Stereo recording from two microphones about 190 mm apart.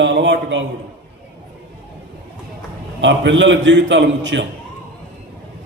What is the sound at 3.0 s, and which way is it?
A man's voice, 70° right (ahead or behind).